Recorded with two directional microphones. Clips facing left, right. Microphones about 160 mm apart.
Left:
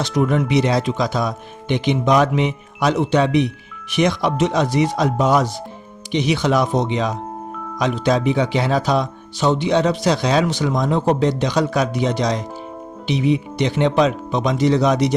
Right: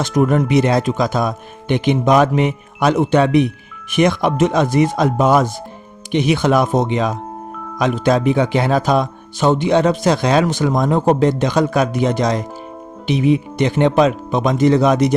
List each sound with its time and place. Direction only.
0.0 s speech: 50° right (ahead or behind)